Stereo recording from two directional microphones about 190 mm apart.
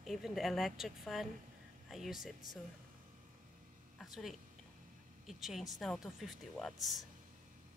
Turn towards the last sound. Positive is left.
turn(degrees=0)  # may be behind; listen again after turning